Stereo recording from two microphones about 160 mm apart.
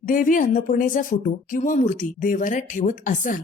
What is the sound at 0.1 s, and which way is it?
A woman's voice, 55° left (ahead or behind).